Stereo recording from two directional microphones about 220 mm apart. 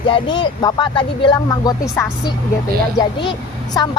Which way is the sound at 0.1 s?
20° left (ahead or behind).